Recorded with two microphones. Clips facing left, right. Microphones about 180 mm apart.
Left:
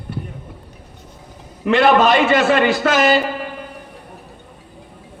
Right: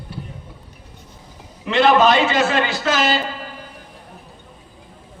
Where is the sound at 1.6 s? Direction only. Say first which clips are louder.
Left 1 dB; 60° left (ahead or behind).